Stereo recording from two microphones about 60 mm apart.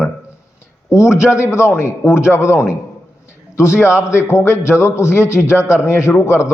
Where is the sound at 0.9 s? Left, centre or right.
Left.